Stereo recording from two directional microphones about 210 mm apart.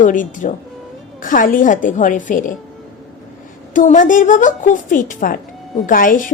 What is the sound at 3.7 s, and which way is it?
A woman's voice, 40° left (ahead or behind).